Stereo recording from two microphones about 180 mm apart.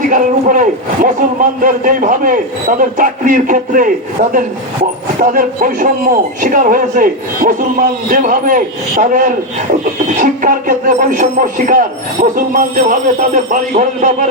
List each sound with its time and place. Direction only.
0.1 s speech: 45° right (ahead or behind)